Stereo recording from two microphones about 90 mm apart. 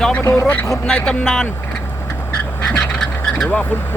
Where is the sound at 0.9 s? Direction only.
10° left (ahead or behind).